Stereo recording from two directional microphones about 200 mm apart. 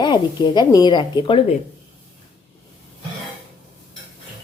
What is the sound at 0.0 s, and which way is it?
Speech, 25° left (ahead or behind).